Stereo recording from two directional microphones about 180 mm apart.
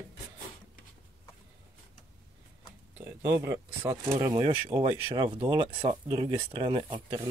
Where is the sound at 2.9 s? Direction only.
15° right (ahead or behind).